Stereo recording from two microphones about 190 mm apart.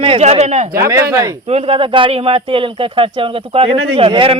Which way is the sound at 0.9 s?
15° right (ahead or behind).